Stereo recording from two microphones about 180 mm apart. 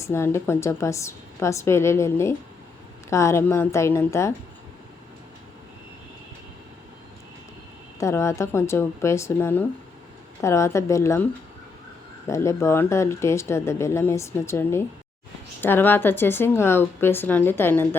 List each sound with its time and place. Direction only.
0.0 s speech: 15° left (ahead or behind)
7.9 s speech: 15° left (ahead or behind)
12.3 s speech: 15° left (ahead or behind)